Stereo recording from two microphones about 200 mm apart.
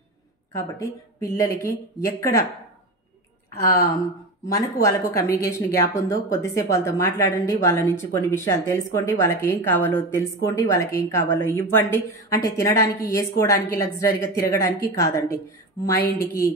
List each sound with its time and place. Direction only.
1.2 s speech: 15° left (ahead or behind)
3.6 s a woman's voice: 50° left (ahead or behind)
4.5 s speech: 15° left (ahead or behind)